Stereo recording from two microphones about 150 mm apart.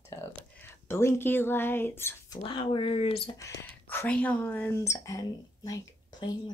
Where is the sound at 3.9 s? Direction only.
10° left (ahead or behind).